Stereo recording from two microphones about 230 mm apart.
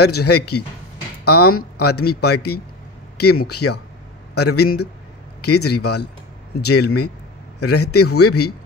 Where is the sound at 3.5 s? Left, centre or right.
Left.